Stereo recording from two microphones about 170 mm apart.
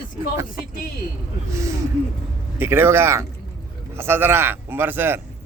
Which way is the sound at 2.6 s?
15° right (ahead or behind).